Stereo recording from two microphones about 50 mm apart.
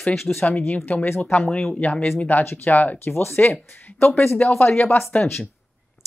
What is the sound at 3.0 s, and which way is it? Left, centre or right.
Speech, left.